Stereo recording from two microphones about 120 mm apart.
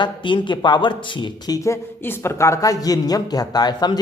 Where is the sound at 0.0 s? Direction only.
40° left (ahead or behind).